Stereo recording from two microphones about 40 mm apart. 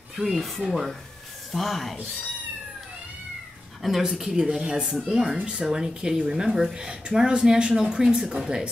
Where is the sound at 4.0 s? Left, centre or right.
Centre.